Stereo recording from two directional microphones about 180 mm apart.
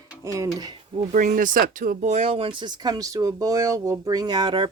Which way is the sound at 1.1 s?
45° right (ahead or behind).